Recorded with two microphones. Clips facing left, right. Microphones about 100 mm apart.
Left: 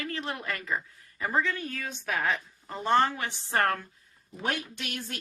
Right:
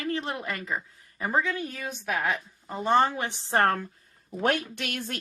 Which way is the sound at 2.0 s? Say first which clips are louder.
Right 1 dB; 5° right (ahead or behind).